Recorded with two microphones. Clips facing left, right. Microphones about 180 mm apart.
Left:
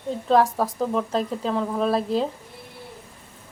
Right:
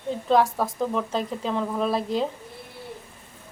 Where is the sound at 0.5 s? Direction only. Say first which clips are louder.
Left 2 dB; 10° left (ahead or behind).